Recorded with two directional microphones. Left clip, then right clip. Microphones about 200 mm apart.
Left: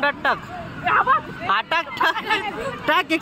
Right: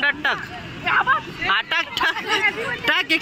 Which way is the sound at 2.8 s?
10° left (ahead or behind).